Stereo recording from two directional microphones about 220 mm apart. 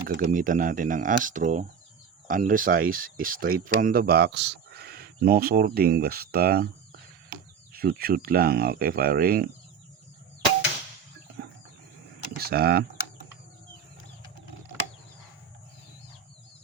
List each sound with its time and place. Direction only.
0.1 s speech: 40° right (ahead or behind)
7.7 s speech: 45° right (ahead or behind)
12.4 s speech: 45° right (ahead or behind)